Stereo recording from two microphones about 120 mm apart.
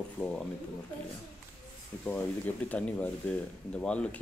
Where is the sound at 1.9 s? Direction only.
20° left (ahead or behind).